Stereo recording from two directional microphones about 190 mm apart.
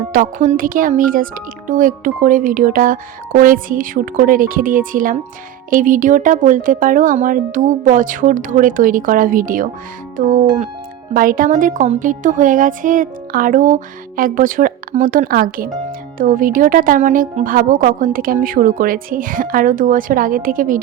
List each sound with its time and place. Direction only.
0.1 s speech: 45° right (ahead or behind)